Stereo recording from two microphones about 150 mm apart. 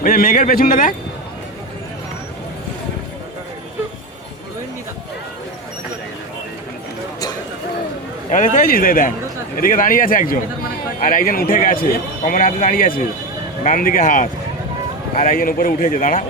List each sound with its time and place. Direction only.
0.0 s speech: 65° left (ahead or behind)
8.3 s speech: 60° left (ahead or behind)